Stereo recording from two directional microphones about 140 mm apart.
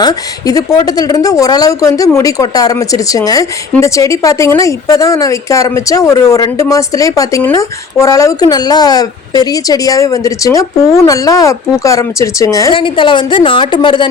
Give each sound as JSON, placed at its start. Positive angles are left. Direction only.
{"t": 0.0, "sound": "speech", "side_deg": 25}
{"t": 12.7, "sound": "a woman's voice", "side_deg": 35}